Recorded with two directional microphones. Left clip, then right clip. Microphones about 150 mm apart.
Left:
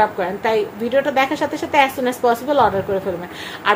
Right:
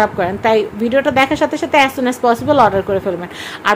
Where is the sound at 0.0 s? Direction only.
30° right (ahead or behind).